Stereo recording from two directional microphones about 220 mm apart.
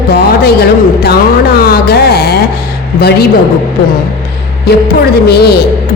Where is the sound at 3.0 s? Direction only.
45° left (ahead or behind).